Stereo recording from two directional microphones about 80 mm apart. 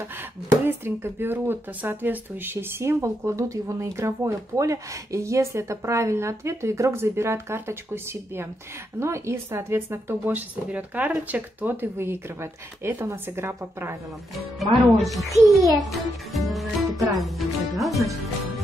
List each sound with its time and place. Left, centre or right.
0.7 s speech: right
14.6 s a child's voice: centre